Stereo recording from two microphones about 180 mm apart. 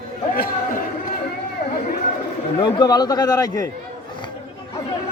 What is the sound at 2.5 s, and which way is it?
A man's voice, 20° left (ahead or behind).